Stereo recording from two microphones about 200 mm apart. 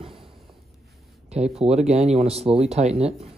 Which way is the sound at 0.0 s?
25° right (ahead or behind).